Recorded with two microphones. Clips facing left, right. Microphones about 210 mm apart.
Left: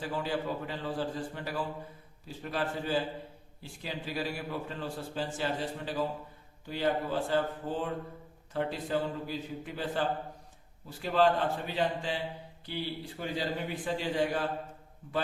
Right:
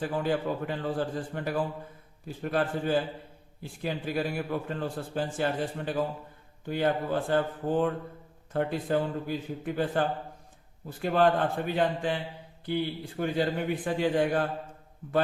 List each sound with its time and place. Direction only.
0.0 s a man's voice: 50° right (ahead or behind)